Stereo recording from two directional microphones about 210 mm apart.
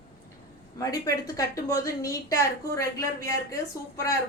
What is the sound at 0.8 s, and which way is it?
A woman's voice, 15° left (ahead or behind).